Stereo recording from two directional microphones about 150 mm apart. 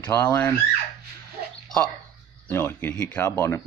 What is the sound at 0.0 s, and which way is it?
Speech, 15° left (ahead or behind).